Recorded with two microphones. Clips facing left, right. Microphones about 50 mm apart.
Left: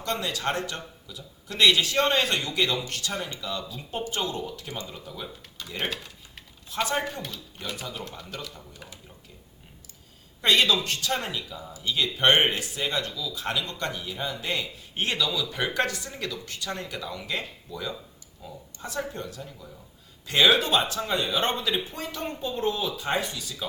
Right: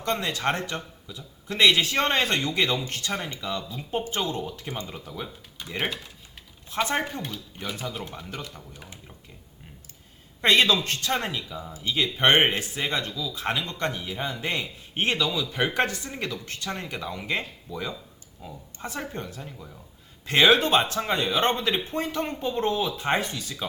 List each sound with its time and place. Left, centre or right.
0.0 s speech: right
10.4 s speech: right
11.1 s speech: centre; by 23.6 s right